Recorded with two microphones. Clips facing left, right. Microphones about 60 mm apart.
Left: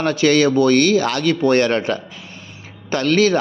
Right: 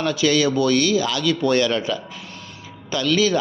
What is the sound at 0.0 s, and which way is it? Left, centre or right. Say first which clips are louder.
A man's voice: left 4 dB; left.